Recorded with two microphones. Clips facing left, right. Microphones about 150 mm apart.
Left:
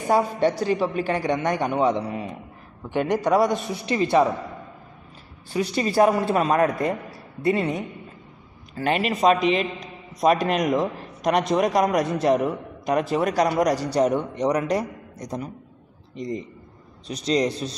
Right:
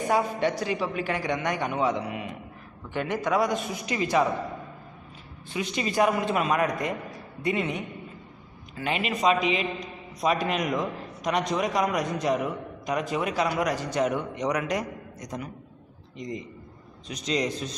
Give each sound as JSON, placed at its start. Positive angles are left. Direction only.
{"t": 0.1, "sound": "a man's voice", "side_deg": 30}
{"t": 5.5, "sound": "a man's voice", "side_deg": 40}
{"t": 11.3, "sound": "a man's voice", "side_deg": 50}